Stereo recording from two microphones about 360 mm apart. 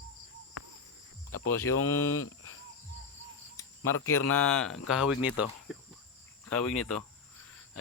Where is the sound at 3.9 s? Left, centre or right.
Left.